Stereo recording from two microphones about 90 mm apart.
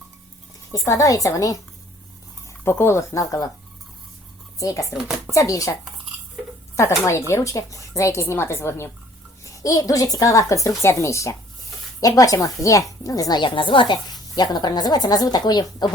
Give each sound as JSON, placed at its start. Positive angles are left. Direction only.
{"t": 0.7, "sound": "speech", "side_deg": 40}
{"t": 2.5, "sound": "speech", "side_deg": 30}
{"t": 4.6, "sound": "speech", "side_deg": 35}
{"t": 6.7, "sound": "speech", "side_deg": 35}
{"t": 13.5, "sound": "speech", "side_deg": 70}